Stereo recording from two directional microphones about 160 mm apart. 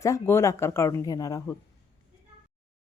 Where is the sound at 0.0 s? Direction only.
15° left (ahead or behind).